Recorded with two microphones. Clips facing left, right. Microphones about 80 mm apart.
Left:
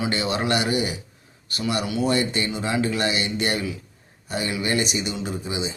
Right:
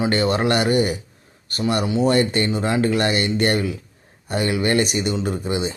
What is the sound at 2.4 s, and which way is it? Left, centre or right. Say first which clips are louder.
Speech: right 4 dB; right.